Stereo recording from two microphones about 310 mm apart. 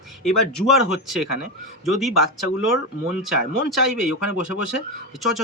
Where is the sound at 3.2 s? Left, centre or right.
Centre.